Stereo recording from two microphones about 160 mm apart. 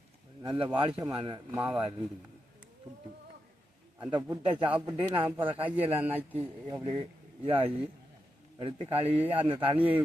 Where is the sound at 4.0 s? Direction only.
30° right (ahead or behind).